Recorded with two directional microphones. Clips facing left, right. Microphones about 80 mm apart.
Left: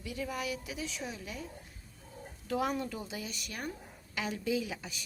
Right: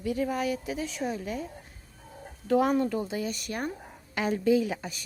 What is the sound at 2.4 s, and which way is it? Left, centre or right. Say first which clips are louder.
A woman's voice: right 9 dB; right.